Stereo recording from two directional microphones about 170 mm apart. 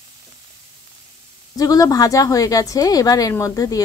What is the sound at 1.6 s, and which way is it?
A woman's voice, 20° left (ahead or behind).